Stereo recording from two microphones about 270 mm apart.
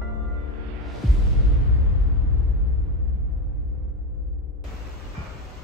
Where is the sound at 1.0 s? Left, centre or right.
Centre.